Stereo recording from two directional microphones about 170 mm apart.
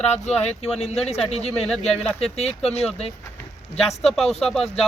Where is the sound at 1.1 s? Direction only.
40° left (ahead or behind).